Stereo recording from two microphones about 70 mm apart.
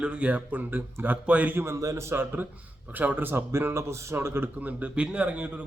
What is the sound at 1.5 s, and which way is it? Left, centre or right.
A man's voice, right.